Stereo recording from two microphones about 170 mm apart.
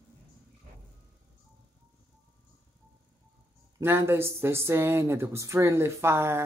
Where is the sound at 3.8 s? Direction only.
15° right (ahead or behind).